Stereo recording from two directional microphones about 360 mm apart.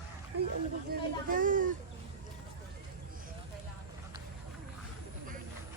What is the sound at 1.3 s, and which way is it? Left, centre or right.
Speech, right.